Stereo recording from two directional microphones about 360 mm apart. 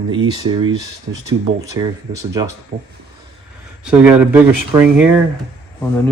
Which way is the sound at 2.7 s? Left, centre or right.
Right.